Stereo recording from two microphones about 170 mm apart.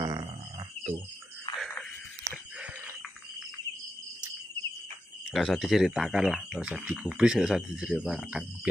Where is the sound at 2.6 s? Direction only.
5° right (ahead or behind).